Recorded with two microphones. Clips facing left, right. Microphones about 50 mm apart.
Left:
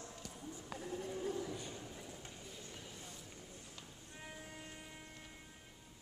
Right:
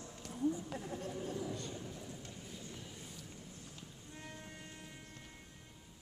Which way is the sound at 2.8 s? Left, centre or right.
Centre.